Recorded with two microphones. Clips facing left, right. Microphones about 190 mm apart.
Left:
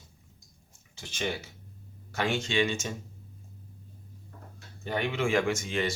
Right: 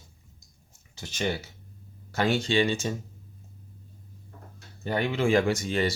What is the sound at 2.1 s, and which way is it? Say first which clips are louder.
Speech: right 4 dB; 35° right (ahead or behind).